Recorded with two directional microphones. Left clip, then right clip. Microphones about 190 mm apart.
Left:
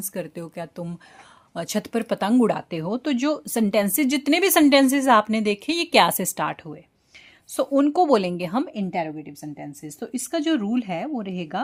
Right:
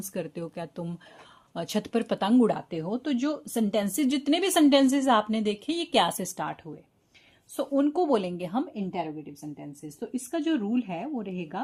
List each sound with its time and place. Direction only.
0.1 s a woman's voice: 15° left (ahead or behind); by 11.6 s 45° left (ahead or behind)